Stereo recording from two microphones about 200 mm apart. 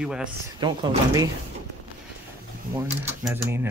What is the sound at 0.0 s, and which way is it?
Speech, 5° right (ahead or behind).